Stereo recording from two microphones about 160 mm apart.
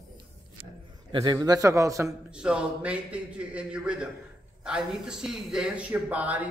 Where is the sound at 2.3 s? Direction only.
5° right (ahead or behind).